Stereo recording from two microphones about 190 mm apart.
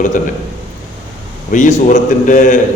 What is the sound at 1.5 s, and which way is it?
A man's voice, 40° left (ahead or behind).